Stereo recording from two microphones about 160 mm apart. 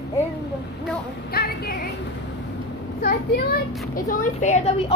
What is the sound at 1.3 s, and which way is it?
Speech, 75° left (ahead or behind).